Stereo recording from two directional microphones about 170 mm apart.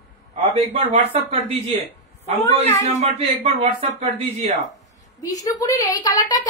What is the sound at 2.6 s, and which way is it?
Speech, 40° right (ahead or behind).